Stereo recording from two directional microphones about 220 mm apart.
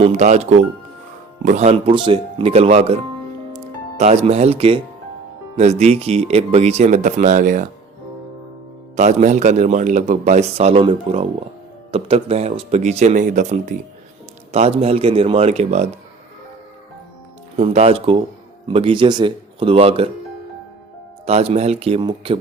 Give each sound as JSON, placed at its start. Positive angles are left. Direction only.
{"t": 0.0, "sound": "a man's voice", "side_deg": -30}
{"t": 9.0, "sound": "a man's voice", "side_deg": -30}
{"t": 17.6, "sound": "speech", "side_deg": -25}
{"t": 21.2, "sound": "speech", "side_deg": -30}